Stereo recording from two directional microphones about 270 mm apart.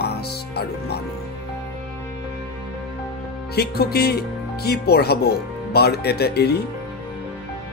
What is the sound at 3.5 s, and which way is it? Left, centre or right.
Speech, left.